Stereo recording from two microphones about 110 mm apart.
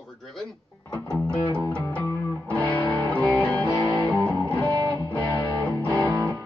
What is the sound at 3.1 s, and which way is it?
Music, 10° left (ahead or behind).